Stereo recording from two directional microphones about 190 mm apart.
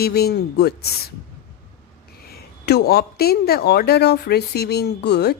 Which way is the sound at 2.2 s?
55° left (ahead or behind).